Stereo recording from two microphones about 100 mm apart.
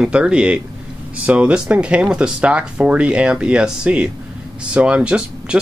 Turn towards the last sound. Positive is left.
turn(degrees=-10)  # may be behind; listen again after turning